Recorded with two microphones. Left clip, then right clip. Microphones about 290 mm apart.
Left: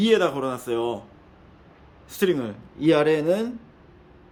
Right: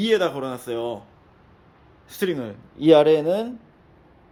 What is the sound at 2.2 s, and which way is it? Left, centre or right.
A man's voice, centre.